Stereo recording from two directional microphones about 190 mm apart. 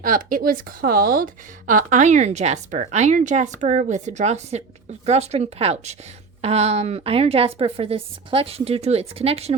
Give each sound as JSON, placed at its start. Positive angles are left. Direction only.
{"t": 0.0, "sound": "speech", "side_deg": -45}